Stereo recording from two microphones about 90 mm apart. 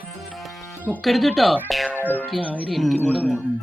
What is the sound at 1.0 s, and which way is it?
Speech, centre (ahead or behind).